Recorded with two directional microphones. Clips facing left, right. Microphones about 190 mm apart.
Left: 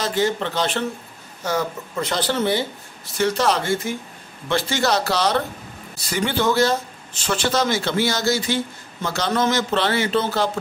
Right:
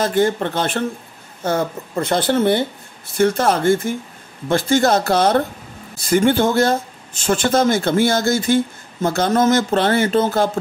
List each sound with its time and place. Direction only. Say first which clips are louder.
0.0 s speech: right 4 dB; 55° right (ahead or behind)